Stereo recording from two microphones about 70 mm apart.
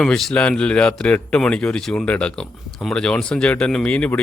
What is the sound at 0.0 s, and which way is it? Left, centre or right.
Speech, centre.